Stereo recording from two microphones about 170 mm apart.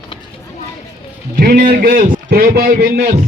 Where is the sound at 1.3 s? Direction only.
60° right (ahead or behind).